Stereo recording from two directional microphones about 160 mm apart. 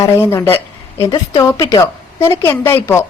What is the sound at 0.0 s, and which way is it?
A woman's voice, 20° left (ahead or behind).